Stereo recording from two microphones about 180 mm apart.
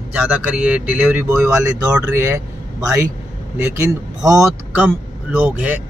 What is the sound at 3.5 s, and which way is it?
Speech, 15° right (ahead or behind).